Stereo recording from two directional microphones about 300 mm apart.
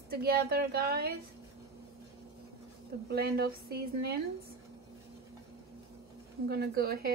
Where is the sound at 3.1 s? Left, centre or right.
Right.